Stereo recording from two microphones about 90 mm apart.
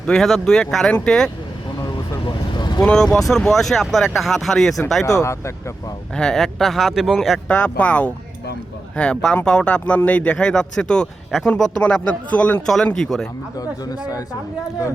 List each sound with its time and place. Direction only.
0.0 s speech: 5° left (ahead or behind)
2.2 s vehicle: 55° left (ahead or behind)
2.8 s speech: 5° left (ahead or behind)
5.0 s speech: 35° left (ahead or behind)
6.1 s speech: 5° left (ahead or behind)
7.4 s speech: 15° left (ahead or behind)